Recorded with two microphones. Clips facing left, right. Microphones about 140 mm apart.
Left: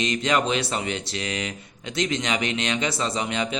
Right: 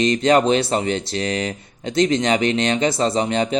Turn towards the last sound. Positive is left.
turn(degrees=-35)  # may be behind; listen again after turning